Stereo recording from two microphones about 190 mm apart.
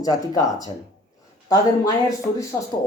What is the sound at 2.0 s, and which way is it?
Speech, 15° left (ahead or behind).